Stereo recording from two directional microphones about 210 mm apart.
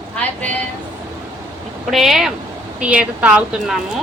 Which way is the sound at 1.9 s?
Centre (ahead or behind).